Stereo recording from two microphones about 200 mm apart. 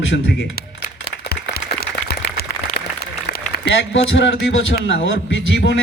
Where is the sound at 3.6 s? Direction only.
70° left (ahead or behind).